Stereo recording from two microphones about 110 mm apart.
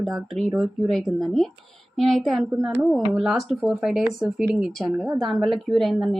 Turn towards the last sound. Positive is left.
turn(degrees=0)  # may be behind; listen again after turning